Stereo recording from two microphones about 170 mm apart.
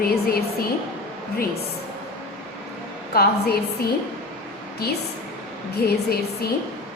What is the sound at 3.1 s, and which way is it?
Speech, 65° left (ahead or behind).